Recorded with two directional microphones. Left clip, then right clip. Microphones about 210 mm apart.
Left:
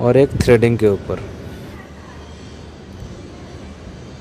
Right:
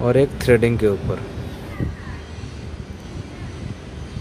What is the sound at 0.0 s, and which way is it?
Speech, 15° left (ahead or behind).